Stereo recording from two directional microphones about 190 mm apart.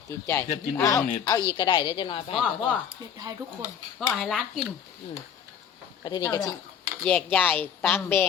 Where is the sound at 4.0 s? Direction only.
Centre (ahead or behind).